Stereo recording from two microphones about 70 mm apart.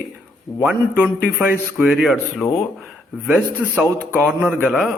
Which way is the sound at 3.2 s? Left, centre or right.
Centre.